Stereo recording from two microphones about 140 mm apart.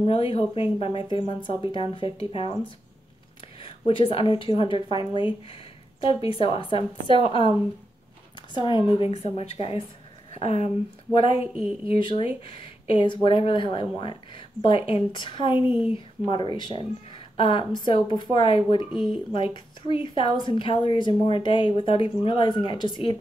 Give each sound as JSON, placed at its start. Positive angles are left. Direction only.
{"t": 0.0, "sound": "speech", "side_deg": 40}
{"t": 3.6, "sound": "speech", "side_deg": 40}
{"t": 8.5, "sound": "speech", "side_deg": 35}
{"t": 8.9, "sound": "a woman's voice", "side_deg": 45}
{"t": 11.4, "sound": "speech", "side_deg": -5}
{"t": 11.8, "sound": "speech", "side_deg": 40}
{"t": 18.9, "sound": "speech", "side_deg": 0}
{"t": 19.3, "sound": "speech", "side_deg": 35}